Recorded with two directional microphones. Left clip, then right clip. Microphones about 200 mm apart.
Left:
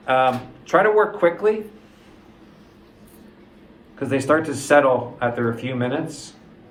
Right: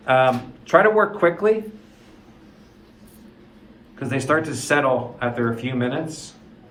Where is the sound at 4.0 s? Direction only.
10° left (ahead or behind).